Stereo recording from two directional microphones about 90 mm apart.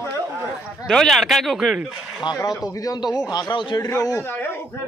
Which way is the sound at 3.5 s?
60° left (ahead or behind).